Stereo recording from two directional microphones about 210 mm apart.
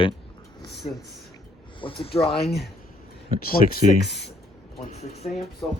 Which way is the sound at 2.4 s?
Centre (ahead or behind).